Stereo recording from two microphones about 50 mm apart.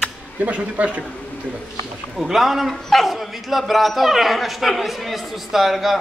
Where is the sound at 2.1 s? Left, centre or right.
Centre.